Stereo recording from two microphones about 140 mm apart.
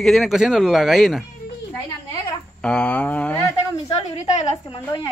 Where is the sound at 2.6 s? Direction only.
5° left (ahead or behind).